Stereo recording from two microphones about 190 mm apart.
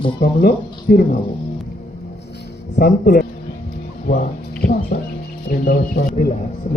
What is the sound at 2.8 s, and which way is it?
Speech, 55° left (ahead or behind).